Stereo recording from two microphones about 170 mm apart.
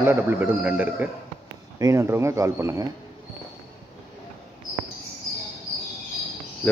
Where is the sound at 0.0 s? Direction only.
10° right (ahead or behind).